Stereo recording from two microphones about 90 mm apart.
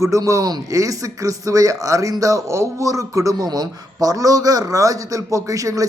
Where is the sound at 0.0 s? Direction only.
35° right (ahead or behind).